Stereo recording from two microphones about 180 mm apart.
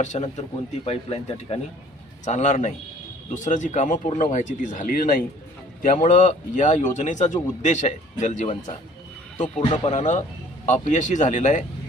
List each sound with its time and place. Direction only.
0.0 s a man's voice: 40° left (ahead or behind)